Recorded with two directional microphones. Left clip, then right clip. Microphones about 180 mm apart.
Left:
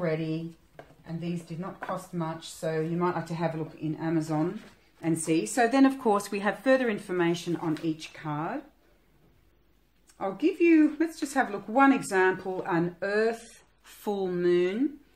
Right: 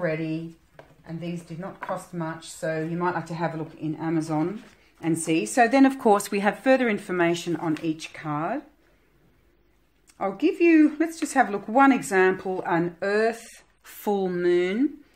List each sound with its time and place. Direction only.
1.0 s speech: 35° right (ahead or behind)
10.1 s speech: 45° right (ahead or behind)